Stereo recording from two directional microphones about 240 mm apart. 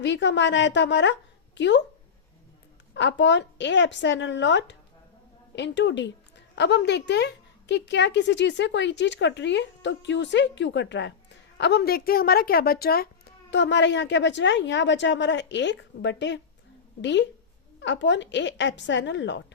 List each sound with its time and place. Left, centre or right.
0.0 s a woman's voice: left
2.9 s a woman's voice: left